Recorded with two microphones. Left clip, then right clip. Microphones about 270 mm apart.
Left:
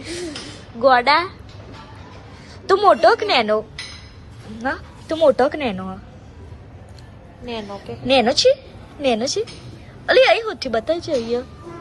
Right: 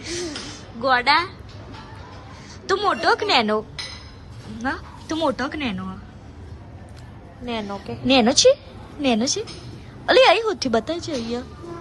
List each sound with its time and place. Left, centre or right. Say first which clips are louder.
0.1 s a sound: even; centre
0.8 s speech: left 4 dB; centre
2.6 s speech: left 6 dB; centre
7.4 s a woman's voice: right 1 dB; right
8.0 s speech: left 1 dB; centre